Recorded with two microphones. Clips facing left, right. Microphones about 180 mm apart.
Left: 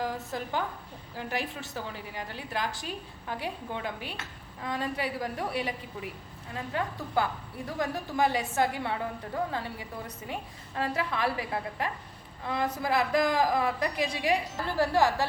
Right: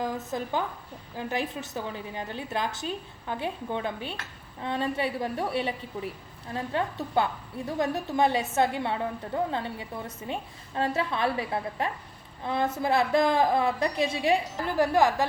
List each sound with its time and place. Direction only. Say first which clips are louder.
0.0 s a woman's voice: right 2 dB; 20° right (ahead or behind)